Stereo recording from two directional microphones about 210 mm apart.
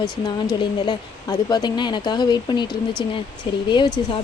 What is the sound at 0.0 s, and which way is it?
Speech, 20° left (ahead or behind).